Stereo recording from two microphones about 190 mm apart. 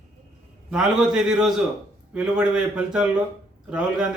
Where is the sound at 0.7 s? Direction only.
5° right (ahead or behind).